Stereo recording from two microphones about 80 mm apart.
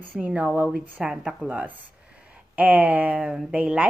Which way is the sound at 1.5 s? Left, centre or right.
Right.